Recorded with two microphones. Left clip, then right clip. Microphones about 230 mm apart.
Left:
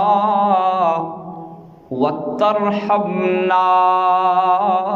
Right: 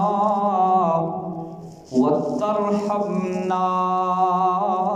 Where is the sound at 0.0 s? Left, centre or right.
Left.